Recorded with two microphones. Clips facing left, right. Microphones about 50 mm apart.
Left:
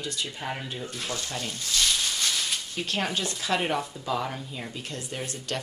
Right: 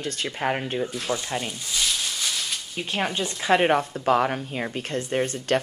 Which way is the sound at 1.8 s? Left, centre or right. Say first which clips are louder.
Even; centre.